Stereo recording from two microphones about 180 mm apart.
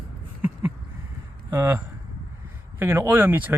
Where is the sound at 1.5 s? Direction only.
15° right (ahead or behind).